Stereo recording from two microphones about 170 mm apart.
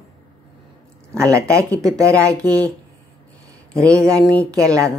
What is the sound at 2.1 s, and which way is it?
Speech, 5° left (ahead or behind).